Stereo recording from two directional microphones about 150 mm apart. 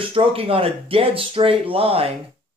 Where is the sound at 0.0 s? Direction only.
35° right (ahead or behind).